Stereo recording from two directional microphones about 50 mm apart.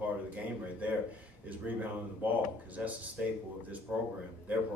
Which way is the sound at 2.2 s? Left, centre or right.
Right.